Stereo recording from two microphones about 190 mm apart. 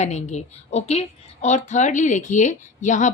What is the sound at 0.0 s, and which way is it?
A woman's voice, 35° left (ahead or behind).